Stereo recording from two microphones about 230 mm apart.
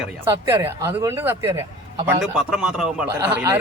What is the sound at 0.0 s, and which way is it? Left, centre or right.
A man's voice, centre.